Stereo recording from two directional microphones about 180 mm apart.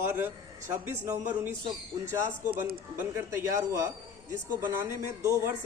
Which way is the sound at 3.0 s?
15° right (ahead or behind).